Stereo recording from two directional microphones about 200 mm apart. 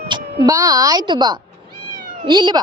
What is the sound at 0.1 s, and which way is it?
A woman's voice, 20° right (ahead or behind).